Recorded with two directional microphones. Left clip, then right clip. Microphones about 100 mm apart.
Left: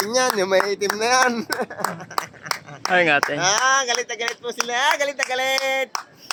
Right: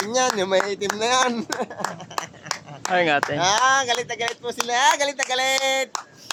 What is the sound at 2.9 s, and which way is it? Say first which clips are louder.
Speech: left 3 dB; centre (ahead or behind).